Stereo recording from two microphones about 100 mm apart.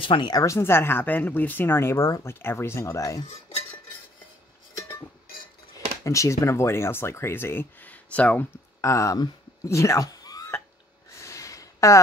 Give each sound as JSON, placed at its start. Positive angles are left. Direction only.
{"t": 0.0, "sound": "speech", "side_deg": 55}
{"t": 0.3, "sound": "speech", "side_deg": 35}
{"t": 0.6, "sound": "speech", "side_deg": 25}
{"t": 2.2, "sound": "speech", "side_deg": 25}
{"t": 6.0, "sound": "speech", "side_deg": 30}
{"t": 8.8, "sound": "speech", "side_deg": 35}
{"t": 11.1, "sound": "a sound", "side_deg": 30}